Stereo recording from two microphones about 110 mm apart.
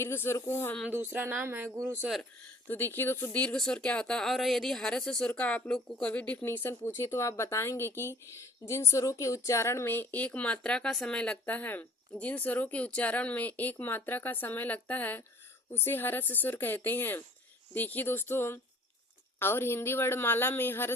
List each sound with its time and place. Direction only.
0.0 s a woman's voice: 20° left (ahead or behind)
0.9 s speech: 15° right (ahead or behind)
2.6 s a woman's voice: 20° left (ahead or behind)
3.4 s a woman's voice: 5° left (ahead or behind)